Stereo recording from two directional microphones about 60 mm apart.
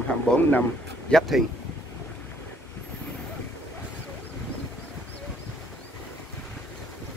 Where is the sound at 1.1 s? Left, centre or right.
Centre.